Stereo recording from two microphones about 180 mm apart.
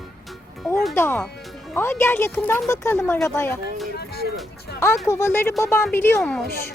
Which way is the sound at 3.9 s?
60° left (ahead or behind).